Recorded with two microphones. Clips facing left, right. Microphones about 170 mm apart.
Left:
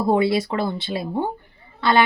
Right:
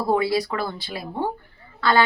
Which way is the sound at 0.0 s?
25° left (ahead or behind).